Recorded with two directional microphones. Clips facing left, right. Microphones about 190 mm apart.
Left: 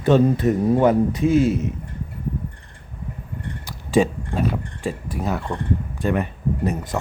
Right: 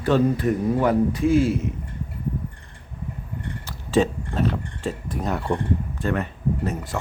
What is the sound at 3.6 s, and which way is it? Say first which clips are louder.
Speech: left 2 dB; 10° left (ahead or behind).